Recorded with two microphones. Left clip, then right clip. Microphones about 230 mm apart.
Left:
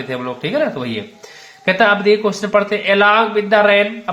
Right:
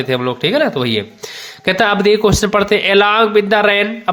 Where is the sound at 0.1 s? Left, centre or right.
Right.